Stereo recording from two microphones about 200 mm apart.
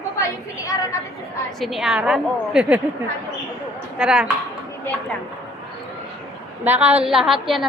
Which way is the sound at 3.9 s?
5° right (ahead or behind).